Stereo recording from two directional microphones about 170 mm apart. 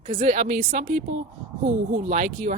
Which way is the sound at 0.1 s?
45° right (ahead or behind).